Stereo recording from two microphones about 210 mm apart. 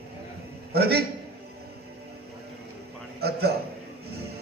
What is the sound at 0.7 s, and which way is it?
Speech, 50° right (ahead or behind).